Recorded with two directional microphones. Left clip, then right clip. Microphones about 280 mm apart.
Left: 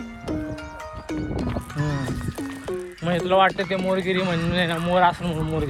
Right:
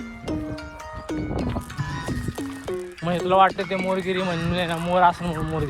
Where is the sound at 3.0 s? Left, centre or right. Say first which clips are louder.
Right 1 dB; right.